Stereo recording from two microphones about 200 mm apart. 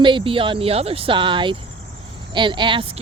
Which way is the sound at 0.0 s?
25° right (ahead or behind).